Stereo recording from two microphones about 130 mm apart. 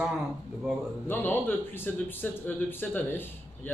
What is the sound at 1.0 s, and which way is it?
Speech, 15° left (ahead or behind).